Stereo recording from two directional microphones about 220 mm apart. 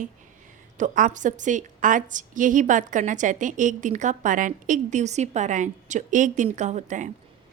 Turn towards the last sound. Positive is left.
turn(degrees=-35)  # may be behind; listen again after turning